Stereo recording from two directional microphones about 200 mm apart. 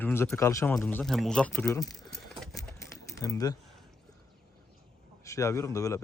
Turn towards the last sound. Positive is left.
turn(degrees=15)  # may be behind; listen again after turning